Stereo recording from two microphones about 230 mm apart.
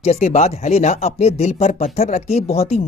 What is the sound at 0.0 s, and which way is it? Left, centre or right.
Speech, left.